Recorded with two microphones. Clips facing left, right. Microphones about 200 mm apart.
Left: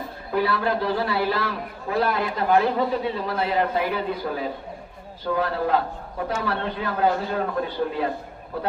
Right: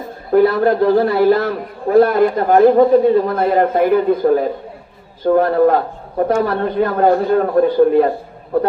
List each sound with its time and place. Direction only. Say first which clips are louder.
0.3 s a man's voice: right 11 dB; 50° right (ahead or behind)